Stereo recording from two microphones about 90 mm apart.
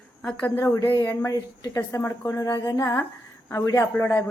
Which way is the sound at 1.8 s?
30° left (ahead or behind).